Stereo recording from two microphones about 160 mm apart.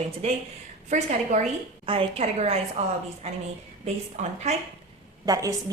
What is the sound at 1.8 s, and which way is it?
A woman's voice, 35° right (ahead or behind).